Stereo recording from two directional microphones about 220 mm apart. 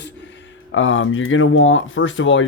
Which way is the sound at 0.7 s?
60° left (ahead or behind).